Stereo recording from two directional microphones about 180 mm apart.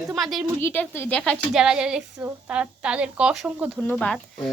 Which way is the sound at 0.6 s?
10° left (ahead or behind).